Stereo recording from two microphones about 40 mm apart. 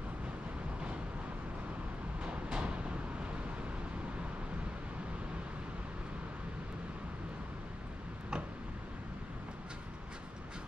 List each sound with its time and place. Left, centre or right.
2.2 s vehicle: right